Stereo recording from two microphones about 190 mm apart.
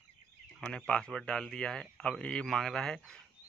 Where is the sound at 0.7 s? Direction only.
5° left (ahead or behind).